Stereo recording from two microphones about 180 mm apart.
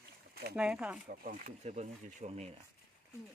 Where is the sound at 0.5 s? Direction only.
5° right (ahead or behind).